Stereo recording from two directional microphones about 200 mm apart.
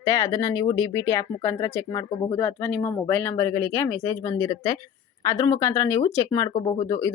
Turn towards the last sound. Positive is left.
turn(degrees=15)  # may be behind; listen again after turning